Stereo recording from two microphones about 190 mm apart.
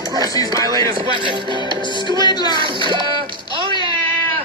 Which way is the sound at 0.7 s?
25° right (ahead or behind).